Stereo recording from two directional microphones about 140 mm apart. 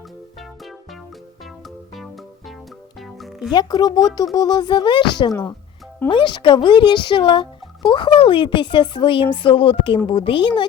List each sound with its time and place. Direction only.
3.0 s music: centre (ahead or behind)
3.5 s speech: 30° left (ahead or behind)